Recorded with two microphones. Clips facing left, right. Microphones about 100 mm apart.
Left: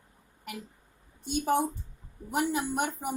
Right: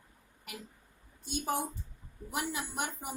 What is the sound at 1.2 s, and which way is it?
A woman's voice, 50° left (ahead or behind).